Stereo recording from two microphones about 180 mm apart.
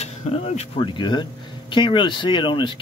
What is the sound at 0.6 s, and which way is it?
Speech, 25° left (ahead or behind).